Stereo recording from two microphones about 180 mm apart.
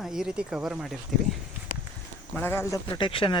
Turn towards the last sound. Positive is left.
turn(degrees=30)  # may be behind; listen again after turning